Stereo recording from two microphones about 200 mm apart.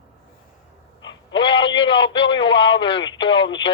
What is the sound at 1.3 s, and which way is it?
A man's voice, 25° left (ahead or behind).